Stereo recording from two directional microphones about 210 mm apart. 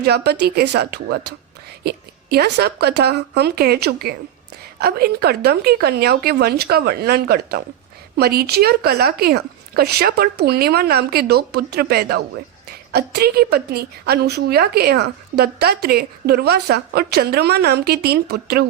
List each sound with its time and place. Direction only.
0.0 s a woman's voice: 50° right (ahead or behind)